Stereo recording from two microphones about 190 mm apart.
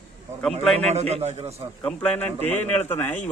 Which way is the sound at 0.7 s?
35° right (ahead or behind).